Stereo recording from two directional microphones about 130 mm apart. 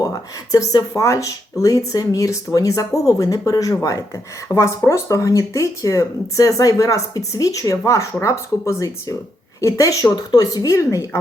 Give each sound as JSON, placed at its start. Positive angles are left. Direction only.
{"t": 0.0, "sound": "speech", "side_deg": 25}